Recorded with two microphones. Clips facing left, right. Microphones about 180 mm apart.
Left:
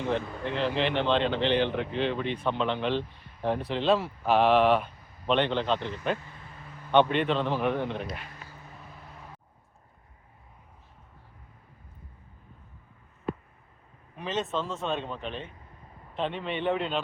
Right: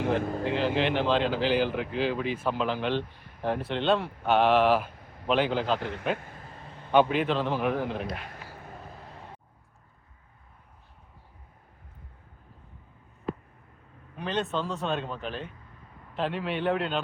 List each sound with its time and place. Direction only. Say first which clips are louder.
0.2 s speech: right 5 dB; 40° right (ahead or behind)
0.5 s speech: even; centre (ahead or behind)
6.1 s vehicle: right 2 dB; 50° right (ahead or behind)
6.9 s speech: even; 5° right (ahead or behind)
8.4 s vehicle: right 4 dB; 55° right (ahead or behind)
14.2 s speech: right 1 dB; centre (ahead or behind)